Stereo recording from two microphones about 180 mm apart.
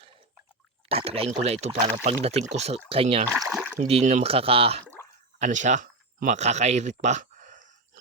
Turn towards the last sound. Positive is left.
turn(degrees=-45)  # may be behind; listen again after turning